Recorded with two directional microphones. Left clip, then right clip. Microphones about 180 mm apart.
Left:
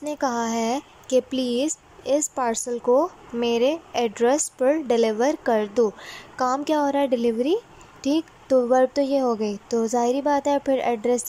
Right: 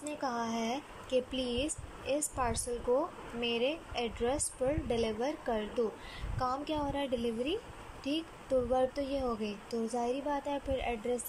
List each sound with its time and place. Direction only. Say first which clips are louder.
0.0 s a woman's voice: left 11 dB; 35° left (ahead or behind)